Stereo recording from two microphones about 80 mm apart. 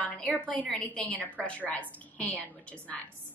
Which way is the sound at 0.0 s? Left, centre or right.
Centre.